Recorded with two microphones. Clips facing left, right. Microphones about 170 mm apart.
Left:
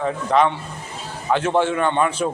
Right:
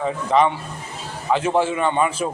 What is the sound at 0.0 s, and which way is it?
A man's voice, 5° right (ahead or behind).